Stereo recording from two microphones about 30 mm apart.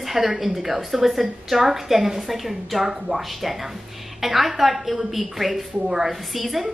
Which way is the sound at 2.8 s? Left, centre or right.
Centre.